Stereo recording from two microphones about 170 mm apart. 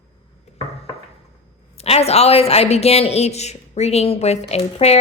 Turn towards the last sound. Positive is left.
turn(degrees=40)  # may be behind; listen again after turning